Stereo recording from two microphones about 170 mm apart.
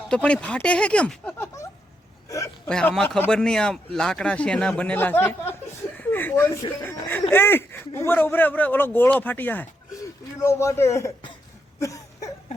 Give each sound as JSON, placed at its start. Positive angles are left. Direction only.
{"t": 0.1, "sound": "speech", "side_deg": 5}
{"t": 2.6, "sound": "speech", "side_deg": 5}
{"t": 11.8, "sound": "a sound", "side_deg": 20}